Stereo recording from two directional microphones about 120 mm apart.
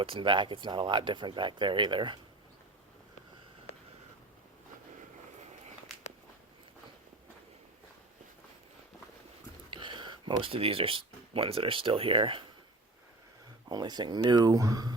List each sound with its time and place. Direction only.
0.0 s speech: 45° right (ahead or behind)
5.9 s walk: centre (ahead or behind)
9.6 s speech: 45° right (ahead or behind)
13.7 s speech: 35° right (ahead or behind)